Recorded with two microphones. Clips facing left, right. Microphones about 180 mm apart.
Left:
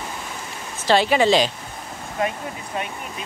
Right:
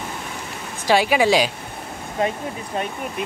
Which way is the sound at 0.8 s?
10° right (ahead or behind).